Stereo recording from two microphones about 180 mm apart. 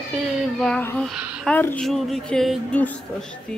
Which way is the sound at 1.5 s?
10° left (ahead or behind).